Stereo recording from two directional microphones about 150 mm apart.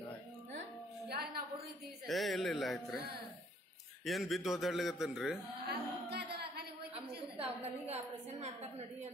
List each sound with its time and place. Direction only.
2.0 s speech: centre (ahead or behind)
4.0 s a man's voice: centre (ahead or behind)
5.7 s music: 90° right
7.2 s a sound: 40° right (ahead or behind)